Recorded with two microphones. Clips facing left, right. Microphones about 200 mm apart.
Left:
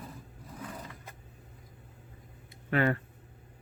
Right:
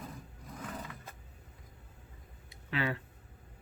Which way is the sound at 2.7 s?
50° left (ahead or behind).